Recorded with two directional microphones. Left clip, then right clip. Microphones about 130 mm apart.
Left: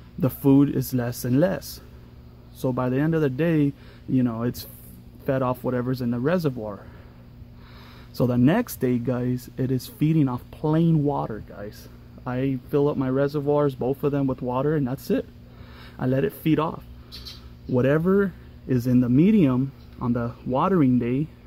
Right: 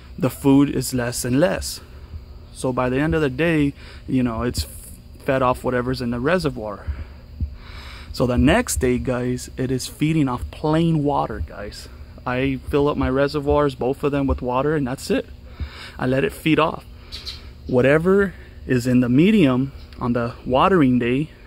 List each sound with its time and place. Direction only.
0.2 s speech: 20° right (ahead or behind)
2.6 s speech: 15° right (ahead or behind)
17.8 s speech: 25° right (ahead or behind)